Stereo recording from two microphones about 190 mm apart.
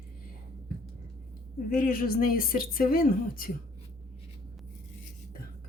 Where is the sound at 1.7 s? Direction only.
50° left (ahead or behind).